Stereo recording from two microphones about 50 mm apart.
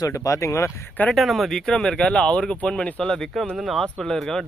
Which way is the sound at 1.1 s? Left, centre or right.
Centre.